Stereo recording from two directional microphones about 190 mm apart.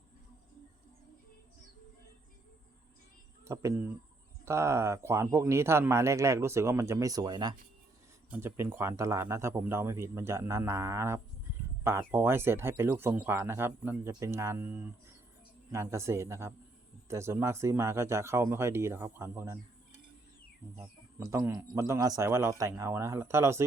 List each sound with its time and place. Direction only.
3.4 s a man's voice: 15° right (ahead or behind)
21.2 s a man's voice: 15° right (ahead or behind)